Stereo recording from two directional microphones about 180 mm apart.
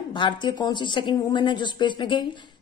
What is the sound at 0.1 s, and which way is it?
A woman's voice, 25° left (ahead or behind).